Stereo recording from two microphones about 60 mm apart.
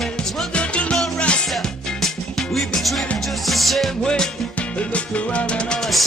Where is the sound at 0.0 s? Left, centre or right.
Centre.